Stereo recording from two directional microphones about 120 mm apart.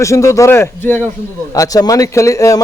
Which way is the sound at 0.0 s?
25° left (ahead or behind).